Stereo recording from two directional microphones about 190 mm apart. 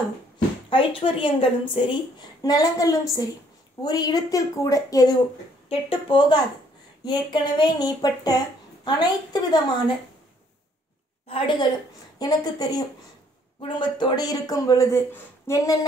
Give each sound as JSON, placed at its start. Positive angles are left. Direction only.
{"t": 0.7, "sound": "a woman's voice", "side_deg": 25}
{"t": 11.2, "sound": "a woman's voice", "side_deg": 30}